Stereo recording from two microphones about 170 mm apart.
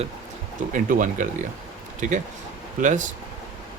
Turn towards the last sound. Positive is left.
turn(degrees=-45)  # may be behind; listen again after turning